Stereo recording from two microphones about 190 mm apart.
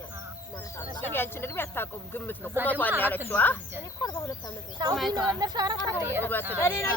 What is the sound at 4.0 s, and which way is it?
Speech, 20° left (ahead or behind).